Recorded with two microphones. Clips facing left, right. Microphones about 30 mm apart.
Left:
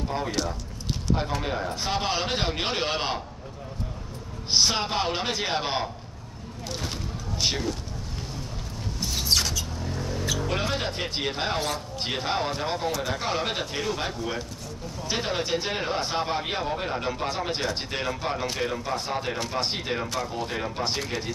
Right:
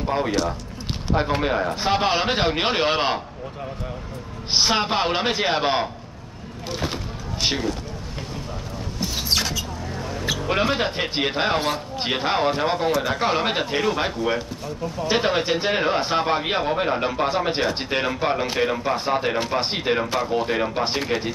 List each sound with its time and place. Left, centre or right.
0.0 s a man's voice: right
4.5 s a man's voice: right
6.8 s a sound: right
9.0 s rodents: centre
10.2 s a man's voice: right